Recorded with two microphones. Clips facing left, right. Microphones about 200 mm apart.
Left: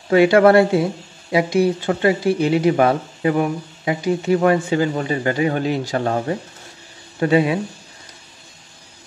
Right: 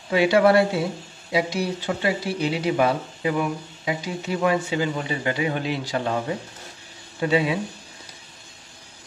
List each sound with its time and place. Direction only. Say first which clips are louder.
0.1 s speech: left 5 dB; 55° left (ahead or behind)